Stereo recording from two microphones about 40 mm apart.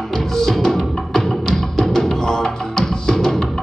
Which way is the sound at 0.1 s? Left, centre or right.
Centre.